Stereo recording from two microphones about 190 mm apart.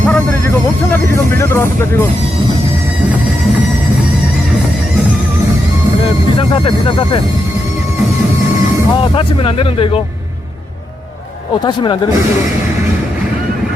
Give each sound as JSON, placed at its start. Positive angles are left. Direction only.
{"t": 0.0, "sound": "vehicle", "side_deg": 10}
{"t": 6.5, "sound": "speech", "side_deg": 25}
{"t": 9.0, "sound": "speech", "side_deg": 25}
{"t": 11.6, "sound": "speech", "side_deg": 25}